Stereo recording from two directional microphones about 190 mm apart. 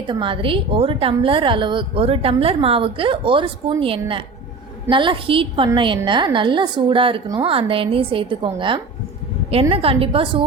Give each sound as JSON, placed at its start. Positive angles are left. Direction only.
{"t": 0.0, "sound": "a woman's voice", "side_deg": -25}